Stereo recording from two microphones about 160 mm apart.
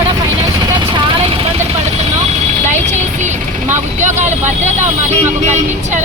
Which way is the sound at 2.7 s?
45° right (ahead or behind).